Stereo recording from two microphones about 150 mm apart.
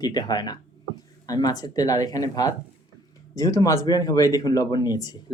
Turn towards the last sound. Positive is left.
turn(degrees=25)  # may be behind; listen again after turning